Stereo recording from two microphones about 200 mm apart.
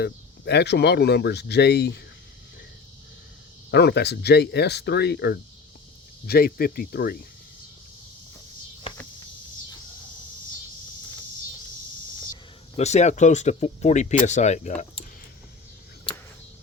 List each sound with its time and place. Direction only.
0.0 s speech: 55° left (ahead or behind)
3.7 s speech: 55° left (ahead or behind)
12.7 s speech: 35° left (ahead or behind)